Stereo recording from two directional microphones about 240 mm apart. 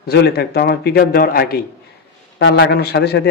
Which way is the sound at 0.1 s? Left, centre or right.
Left.